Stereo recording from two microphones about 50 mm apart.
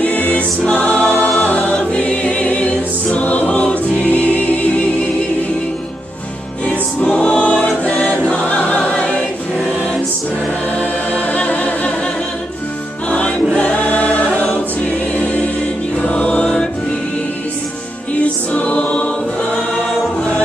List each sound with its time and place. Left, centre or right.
0.0 s music: left
0.7 s choir: left
6.7 s choir: left
10.8 s choir: left
13.6 s choir: left
16.0 s music: left
18.5 s choir: left